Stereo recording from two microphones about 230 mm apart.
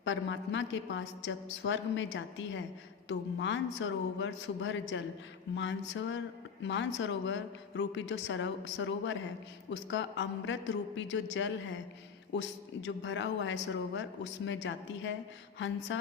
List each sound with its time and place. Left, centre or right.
0.0 s a woman's voice: left